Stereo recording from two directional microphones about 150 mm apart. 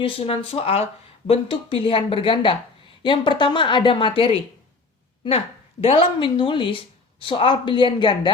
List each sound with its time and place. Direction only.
0.0 s a woman's voice: 40° left (ahead or behind)
5.8 s a woman's voice: 35° left (ahead or behind)